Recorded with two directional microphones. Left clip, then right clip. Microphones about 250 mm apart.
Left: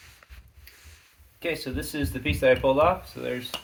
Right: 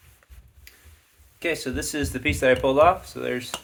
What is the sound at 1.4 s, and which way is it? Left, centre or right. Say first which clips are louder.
Speech: right 3 dB; right.